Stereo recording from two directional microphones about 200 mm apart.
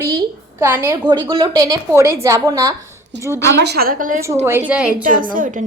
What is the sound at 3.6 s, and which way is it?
Speech, 55° right (ahead or behind).